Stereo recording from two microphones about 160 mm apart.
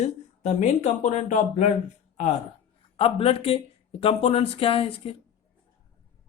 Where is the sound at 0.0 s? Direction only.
45° left (ahead or behind).